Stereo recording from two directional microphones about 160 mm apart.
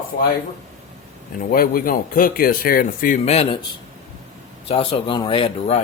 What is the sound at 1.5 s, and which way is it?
Speech, 65° left (ahead or behind).